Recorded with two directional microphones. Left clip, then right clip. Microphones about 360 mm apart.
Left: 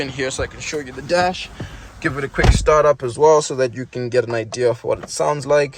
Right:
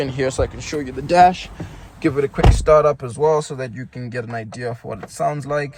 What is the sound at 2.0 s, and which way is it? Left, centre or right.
Speech, centre.